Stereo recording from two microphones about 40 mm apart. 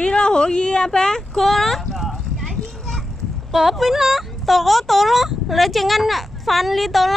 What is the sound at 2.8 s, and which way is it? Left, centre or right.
Speech, centre.